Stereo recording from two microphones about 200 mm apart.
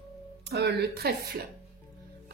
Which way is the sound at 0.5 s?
55° right (ahead or behind).